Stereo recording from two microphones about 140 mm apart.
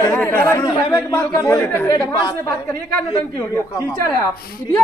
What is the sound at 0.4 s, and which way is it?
Speech, 20° left (ahead or behind).